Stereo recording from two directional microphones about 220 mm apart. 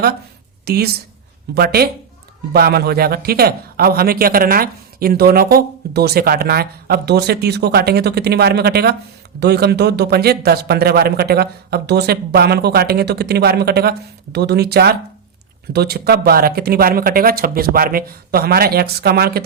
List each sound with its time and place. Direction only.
0.6 s a woman's voice: 45° right (ahead or behind)